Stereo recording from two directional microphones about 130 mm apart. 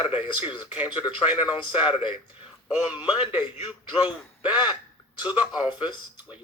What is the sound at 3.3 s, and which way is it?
Speech, 10° right (ahead or behind).